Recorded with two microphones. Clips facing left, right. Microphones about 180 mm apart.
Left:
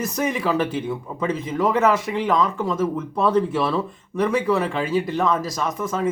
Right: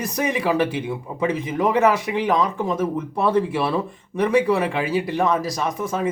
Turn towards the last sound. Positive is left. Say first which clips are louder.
# right 1 dB
turn(degrees=-10)  # may be behind; listen again after turning